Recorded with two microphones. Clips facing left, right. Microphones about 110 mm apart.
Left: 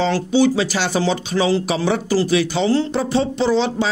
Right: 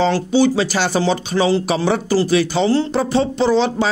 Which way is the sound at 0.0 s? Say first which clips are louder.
Right 1 dB; 40° right (ahead or behind).